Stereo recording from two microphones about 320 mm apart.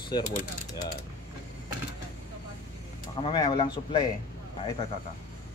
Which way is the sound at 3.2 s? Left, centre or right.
Centre.